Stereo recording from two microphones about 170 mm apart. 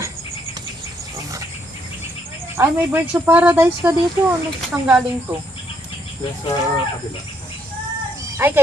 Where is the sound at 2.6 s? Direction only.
10° right (ahead or behind).